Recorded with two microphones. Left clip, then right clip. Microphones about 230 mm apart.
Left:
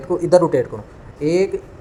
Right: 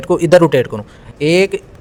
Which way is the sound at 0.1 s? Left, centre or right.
Right.